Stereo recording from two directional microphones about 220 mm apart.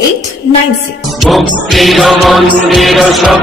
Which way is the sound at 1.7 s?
Centre (ahead or behind).